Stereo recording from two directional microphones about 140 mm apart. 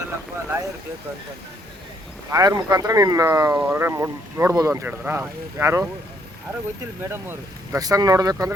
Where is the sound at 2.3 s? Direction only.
25° right (ahead or behind).